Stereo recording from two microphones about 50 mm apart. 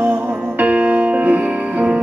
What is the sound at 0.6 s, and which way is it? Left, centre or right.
Music, right.